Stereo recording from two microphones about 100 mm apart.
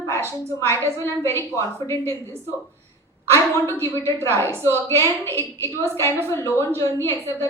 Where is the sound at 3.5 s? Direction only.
25° left (ahead or behind).